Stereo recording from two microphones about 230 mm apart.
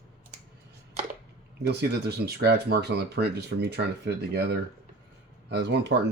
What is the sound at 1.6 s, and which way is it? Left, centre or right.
Speech, right.